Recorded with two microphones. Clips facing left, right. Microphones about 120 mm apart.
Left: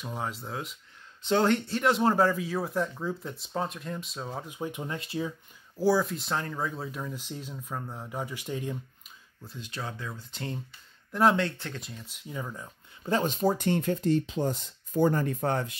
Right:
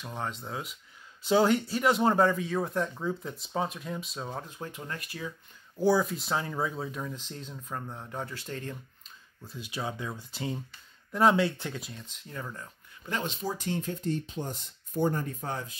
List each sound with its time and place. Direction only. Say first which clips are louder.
0.0 s speech: left 1 dB; 5° left (ahead or behind)
4.5 s speech: left 5 dB; 15° left (ahead or behind)
5.8 s speech: even; centre (ahead or behind)
9.4 s speech: right 2 dB; 5° right (ahead or behind)
10.3 s speech: right 2 dB; 5° right (ahead or behind); by 12.7 s 10° left (ahead or behind)
13.0 s speech: left 7 dB; 40° left (ahead or behind); by 15.8 s 70° left (ahead or behind)